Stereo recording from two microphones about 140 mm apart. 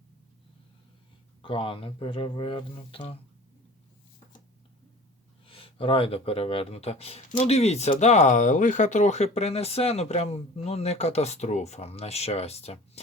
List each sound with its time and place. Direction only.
1.4 s speech: 40° left (ahead or behind)
5.5 s speech: 40° left (ahead or behind)